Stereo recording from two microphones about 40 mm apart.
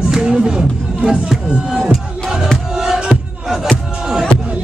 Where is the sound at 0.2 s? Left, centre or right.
Right.